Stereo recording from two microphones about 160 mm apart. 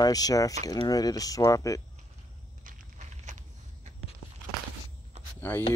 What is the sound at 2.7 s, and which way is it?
Walk, 50° right (ahead or behind).